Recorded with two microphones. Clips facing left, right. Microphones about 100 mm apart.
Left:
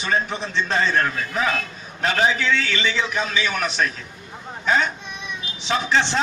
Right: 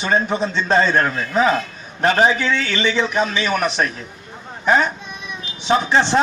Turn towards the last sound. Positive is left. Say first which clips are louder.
# right 5 dB
turn(degrees=-30)  # may be behind; listen again after turning